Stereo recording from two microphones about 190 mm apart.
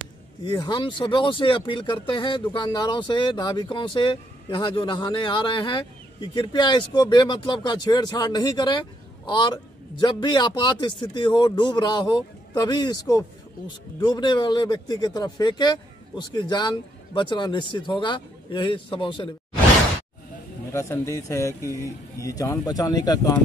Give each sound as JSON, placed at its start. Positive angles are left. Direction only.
{"t": 0.5, "sound": "speech", "side_deg": 25}
{"t": 20.7, "sound": "speech", "side_deg": 15}